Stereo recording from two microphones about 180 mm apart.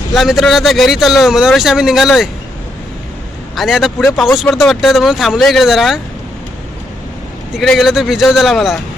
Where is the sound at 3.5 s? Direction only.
Centre (ahead or behind).